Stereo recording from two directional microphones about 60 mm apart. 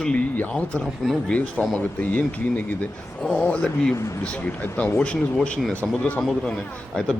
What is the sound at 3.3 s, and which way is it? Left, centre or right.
Speech, centre.